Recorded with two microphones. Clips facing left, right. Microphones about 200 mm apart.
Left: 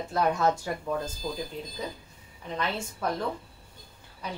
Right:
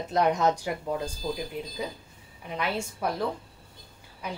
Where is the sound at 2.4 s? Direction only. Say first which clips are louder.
Right 1 dB; 10° right (ahead or behind).